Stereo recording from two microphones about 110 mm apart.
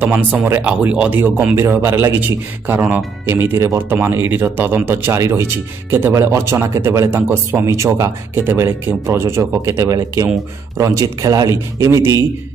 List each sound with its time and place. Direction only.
0.0 s speech: 15° right (ahead or behind)